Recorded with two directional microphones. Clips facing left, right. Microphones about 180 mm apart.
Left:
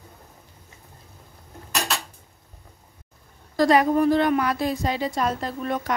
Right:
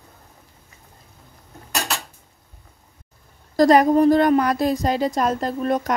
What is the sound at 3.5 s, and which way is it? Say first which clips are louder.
A woman's voice: right 4 dB; 40° right (ahead or behind).